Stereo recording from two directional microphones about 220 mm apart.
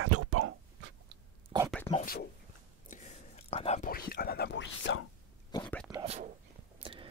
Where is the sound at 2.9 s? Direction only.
30° left (ahead or behind); by 5.0 s 55° left (ahead or behind).